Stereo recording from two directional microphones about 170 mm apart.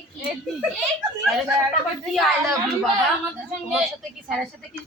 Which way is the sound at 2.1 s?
Centre (ahead or behind).